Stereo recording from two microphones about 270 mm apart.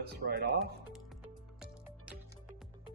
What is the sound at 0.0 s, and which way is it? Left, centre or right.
Speech, right.